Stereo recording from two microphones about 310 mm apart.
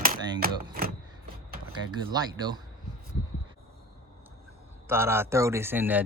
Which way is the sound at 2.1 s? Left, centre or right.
Centre.